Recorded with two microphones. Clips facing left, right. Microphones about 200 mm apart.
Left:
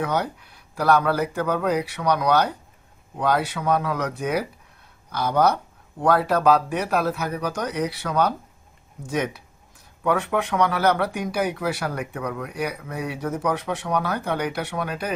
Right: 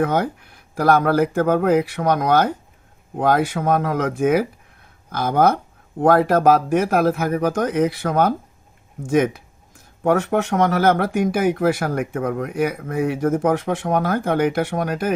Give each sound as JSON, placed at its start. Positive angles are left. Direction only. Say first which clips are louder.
{"t": 0.0, "sound": "speech", "louder": "right 5 dB", "side_deg": -50}